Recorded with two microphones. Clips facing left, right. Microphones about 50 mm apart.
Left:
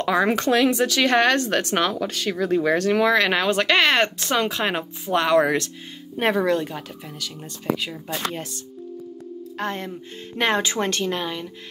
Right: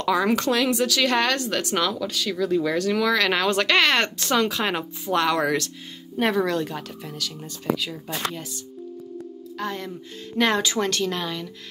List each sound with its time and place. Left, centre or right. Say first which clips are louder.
0.0 s speech: left 1 dB; left
3.3 s speech: left 1 dB; centre
6.7 s speech: right 1 dB; centre
9.6 s speech: left 2 dB; left
9.8 s speech: left 1 dB; left